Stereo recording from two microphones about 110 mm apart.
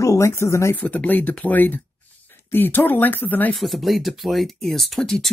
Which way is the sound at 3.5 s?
Centre (ahead or behind).